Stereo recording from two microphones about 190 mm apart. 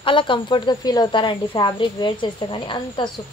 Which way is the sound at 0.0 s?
25° left (ahead or behind).